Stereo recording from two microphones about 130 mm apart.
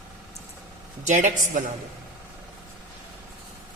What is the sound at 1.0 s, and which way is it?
Speech, 70° right (ahead or behind).